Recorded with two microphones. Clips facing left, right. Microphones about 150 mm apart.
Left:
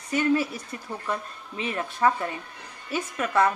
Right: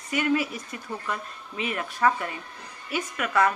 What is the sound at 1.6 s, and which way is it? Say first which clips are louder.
A woman's voice: left 1 dB; 30° left (ahead or behind).